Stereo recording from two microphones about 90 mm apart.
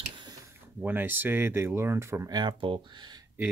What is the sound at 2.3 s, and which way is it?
Speech, 55° right (ahead or behind).